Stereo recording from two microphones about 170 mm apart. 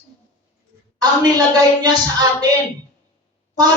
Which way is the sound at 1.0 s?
25° right (ahead or behind).